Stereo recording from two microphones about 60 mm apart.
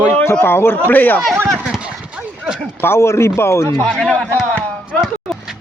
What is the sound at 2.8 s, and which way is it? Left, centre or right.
Speech, left.